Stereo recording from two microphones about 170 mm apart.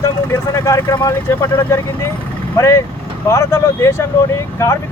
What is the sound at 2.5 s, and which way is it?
Speech, 15° left (ahead or behind).